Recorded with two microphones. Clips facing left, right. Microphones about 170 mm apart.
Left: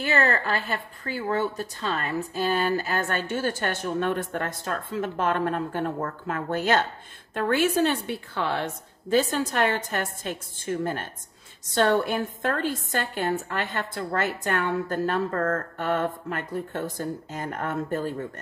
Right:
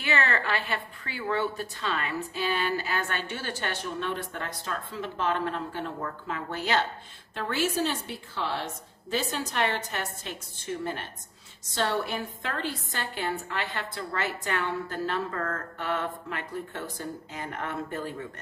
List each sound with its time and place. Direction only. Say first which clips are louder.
0.0 s a woman's voice: left 4 dB; 40° left (ahead or behind)